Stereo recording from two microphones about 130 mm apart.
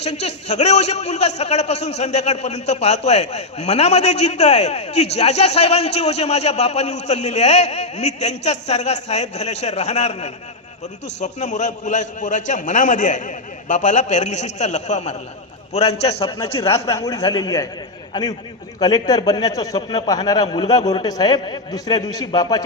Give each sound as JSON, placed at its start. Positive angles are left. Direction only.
{"t": 0.0, "sound": "a man's voice", "side_deg": 55}
{"t": 16.2, "sound": "a man's voice", "side_deg": 25}